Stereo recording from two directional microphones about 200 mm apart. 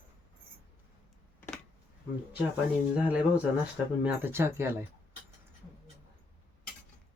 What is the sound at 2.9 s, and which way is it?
Speech, 5° right (ahead or behind).